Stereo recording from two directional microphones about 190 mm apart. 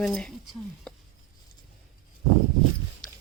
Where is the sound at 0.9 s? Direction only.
5° left (ahead or behind).